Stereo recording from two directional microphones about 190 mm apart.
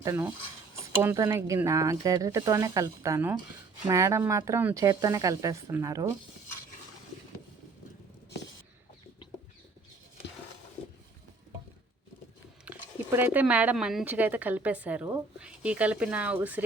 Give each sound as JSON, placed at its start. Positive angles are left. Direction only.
{"t": 0.0, "sound": "speech", "side_deg": -15}
{"t": 12.6, "sound": "speech", "side_deg": -10}